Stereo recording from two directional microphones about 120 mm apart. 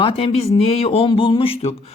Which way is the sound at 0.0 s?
50° left (ahead or behind).